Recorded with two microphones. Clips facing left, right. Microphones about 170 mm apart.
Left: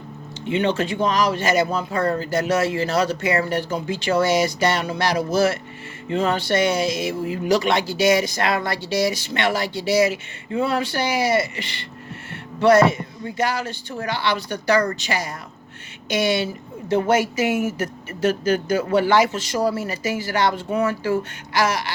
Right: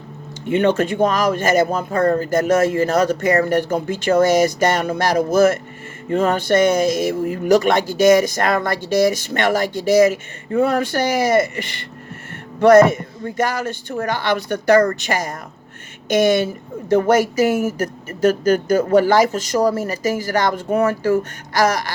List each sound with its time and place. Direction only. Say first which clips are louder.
0.4 s speech: right 5 dB; 50° right (ahead or behind)